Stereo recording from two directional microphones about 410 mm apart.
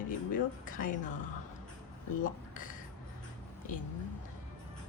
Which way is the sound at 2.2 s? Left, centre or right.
Centre.